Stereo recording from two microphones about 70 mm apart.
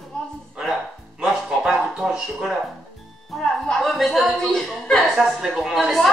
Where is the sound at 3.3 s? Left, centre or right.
Centre.